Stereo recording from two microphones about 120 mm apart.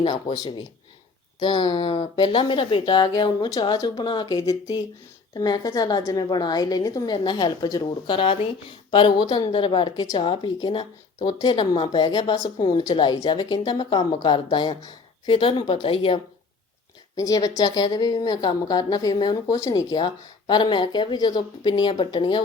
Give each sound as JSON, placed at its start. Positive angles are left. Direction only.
{"t": 0.0, "sound": "speech", "side_deg": 45}
{"t": 1.4, "sound": "a woman's voice", "side_deg": 35}
{"t": 17.2, "sound": "a woman's voice", "side_deg": 30}
{"t": 20.5, "sound": "a woman's voice", "side_deg": 40}